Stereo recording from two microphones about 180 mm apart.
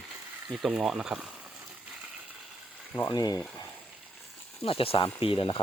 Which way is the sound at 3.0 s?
20° left (ahead or behind).